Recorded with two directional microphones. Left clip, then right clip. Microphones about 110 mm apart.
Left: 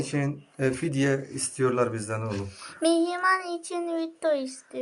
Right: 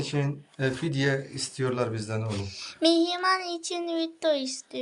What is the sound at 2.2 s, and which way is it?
A child's voice, 20° right (ahead or behind).